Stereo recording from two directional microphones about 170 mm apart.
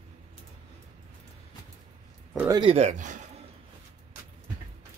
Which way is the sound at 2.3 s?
15° right (ahead or behind).